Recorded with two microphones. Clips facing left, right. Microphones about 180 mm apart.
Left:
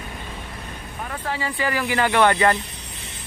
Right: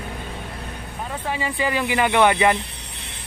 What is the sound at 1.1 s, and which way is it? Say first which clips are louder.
Speech: right 1 dB; 15° right (ahead or behind).